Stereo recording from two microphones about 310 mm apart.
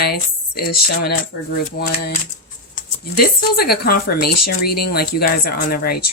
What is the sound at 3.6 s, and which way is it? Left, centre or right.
Speech, left.